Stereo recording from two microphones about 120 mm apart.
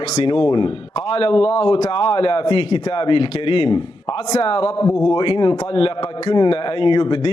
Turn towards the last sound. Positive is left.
turn(degrees=45)  # may be behind; listen again after turning